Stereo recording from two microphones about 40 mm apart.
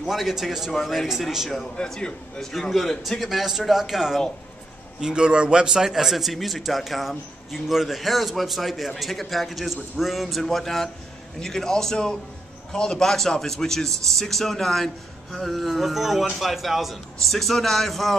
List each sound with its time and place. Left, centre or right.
0.0 s a man's voice: centre
2.0 s a man's voice: left
2.7 s a man's voice: centre
3.3 s speech: centre
5.0 s a man's voice: right
5.9 s a man's voice: centre